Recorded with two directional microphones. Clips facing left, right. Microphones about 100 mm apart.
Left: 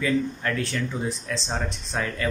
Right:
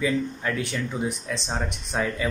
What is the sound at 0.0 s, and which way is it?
Speech, 10° right (ahead or behind).